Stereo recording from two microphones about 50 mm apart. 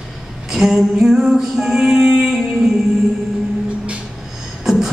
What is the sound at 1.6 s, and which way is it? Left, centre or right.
Music, centre.